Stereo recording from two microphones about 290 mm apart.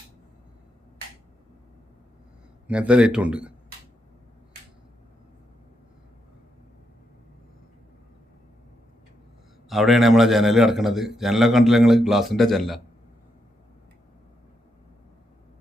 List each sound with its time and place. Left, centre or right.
2.6 s a man's voice: centre
9.6 s a man's voice: centre